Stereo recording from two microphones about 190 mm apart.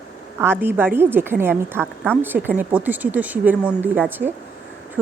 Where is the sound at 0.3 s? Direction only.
10° right (ahead or behind).